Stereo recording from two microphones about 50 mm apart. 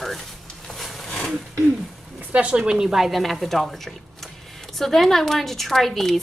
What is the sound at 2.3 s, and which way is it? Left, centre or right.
Speech, right.